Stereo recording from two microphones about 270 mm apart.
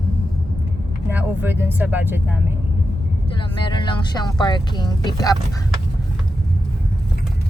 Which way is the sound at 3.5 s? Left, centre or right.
Centre.